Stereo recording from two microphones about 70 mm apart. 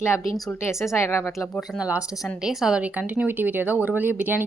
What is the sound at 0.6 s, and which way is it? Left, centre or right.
Speech, left.